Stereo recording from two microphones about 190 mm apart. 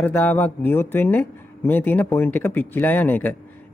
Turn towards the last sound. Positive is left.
turn(degrees=10)  # may be behind; listen again after turning